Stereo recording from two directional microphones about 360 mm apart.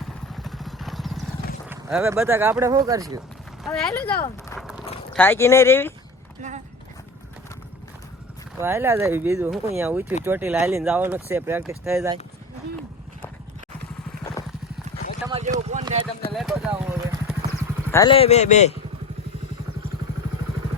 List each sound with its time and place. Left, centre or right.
0.0 s vehicle: centre
1.7 s speech: centre
3.6 s speech: centre
8.6 s speech: centre
15.3 s a sound: centre
16.3 s vehicle: centre
17.5 s speech: centre